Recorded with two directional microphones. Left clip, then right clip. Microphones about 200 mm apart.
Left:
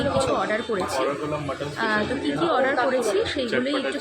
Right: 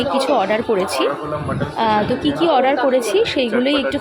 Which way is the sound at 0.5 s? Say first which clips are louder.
Right 7 dB; 40° right (ahead or behind).